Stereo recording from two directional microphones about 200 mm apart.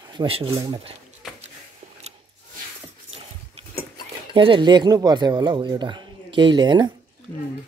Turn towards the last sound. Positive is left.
turn(degrees=-20)  # may be behind; listen again after turning